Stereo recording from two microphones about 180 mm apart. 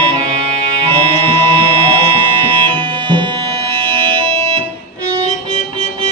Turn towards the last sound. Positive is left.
turn(degrees=-30)  # may be behind; listen again after turning